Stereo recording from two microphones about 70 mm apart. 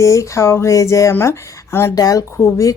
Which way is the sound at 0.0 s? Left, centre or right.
Left.